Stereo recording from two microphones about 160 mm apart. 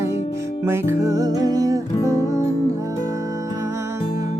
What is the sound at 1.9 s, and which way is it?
Music, 20° left (ahead or behind).